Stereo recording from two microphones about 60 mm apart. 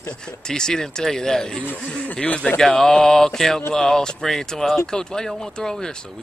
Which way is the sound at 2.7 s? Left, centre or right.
Centre.